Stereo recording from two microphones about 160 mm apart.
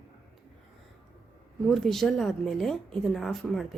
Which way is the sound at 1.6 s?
Centre (ahead or behind).